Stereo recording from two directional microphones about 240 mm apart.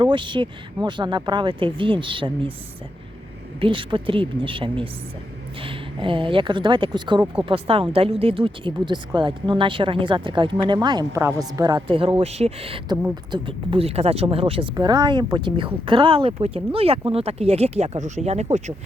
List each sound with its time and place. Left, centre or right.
0.0 s speech: centre
3.6 s speech: right